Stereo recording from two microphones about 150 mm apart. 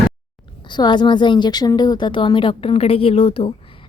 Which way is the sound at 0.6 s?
30° left (ahead or behind).